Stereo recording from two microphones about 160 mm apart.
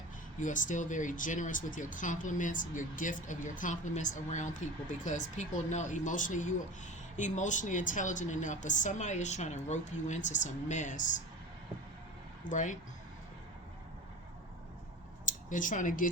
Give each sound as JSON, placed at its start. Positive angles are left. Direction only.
{"t": 0.3, "sound": "speech", "side_deg": 55}
{"t": 12.5, "sound": "speech", "side_deg": 50}
{"t": 15.3, "sound": "speech", "side_deg": 55}